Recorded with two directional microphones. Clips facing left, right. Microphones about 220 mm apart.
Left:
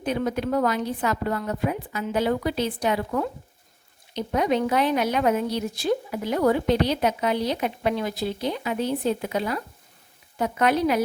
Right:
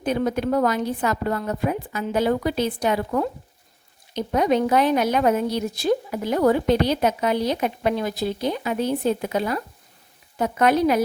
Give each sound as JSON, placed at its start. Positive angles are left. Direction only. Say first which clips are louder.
{"t": 0.0, "sound": "a woman's voice", "louder": "right 3 dB", "side_deg": -45}